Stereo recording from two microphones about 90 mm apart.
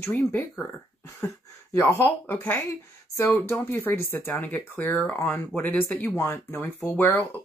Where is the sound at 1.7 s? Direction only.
30° left (ahead or behind).